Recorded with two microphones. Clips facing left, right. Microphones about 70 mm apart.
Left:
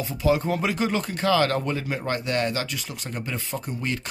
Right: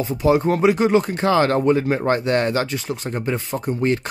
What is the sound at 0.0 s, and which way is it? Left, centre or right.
Speech, right.